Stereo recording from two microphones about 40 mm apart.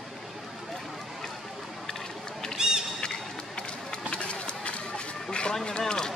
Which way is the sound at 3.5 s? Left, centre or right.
Left.